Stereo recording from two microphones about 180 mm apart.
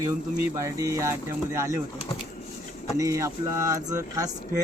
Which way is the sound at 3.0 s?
15° right (ahead or behind).